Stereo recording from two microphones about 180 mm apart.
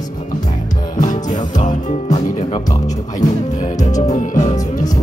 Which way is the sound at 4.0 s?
40° left (ahead or behind).